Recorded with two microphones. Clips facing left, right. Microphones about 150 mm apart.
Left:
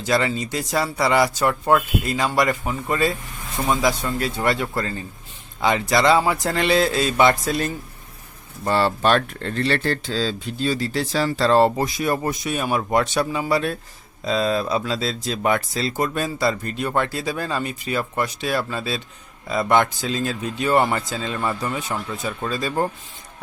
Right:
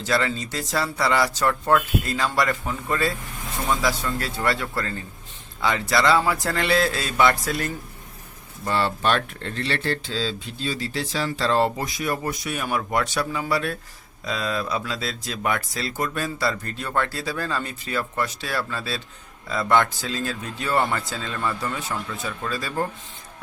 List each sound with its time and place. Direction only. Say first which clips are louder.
0.0 s speech: left 3 dB; 15° left (ahead or behind)
8.6 s speech: left 4 dB; 40° left (ahead or behind); by 22.9 s 25° left (ahead or behind)